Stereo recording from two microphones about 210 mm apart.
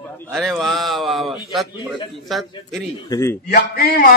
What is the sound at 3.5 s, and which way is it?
Speech, 45° left (ahead or behind).